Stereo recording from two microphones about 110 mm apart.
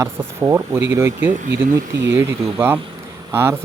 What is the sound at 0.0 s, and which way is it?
Speech, 25° right (ahead or behind).